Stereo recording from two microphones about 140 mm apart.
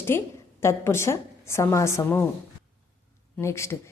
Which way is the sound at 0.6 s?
20° left (ahead or behind).